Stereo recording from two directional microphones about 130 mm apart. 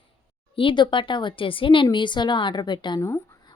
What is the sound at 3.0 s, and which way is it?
Speech, 20° left (ahead or behind).